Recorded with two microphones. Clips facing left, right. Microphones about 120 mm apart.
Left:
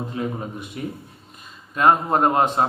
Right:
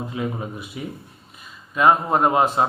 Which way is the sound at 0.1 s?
40° left (ahead or behind).